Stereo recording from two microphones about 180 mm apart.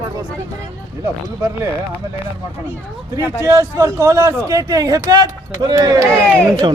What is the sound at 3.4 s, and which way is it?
A man's voice, 15° right (ahead or behind).